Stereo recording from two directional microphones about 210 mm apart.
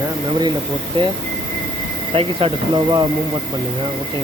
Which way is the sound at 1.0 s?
25° right (ahead or behind).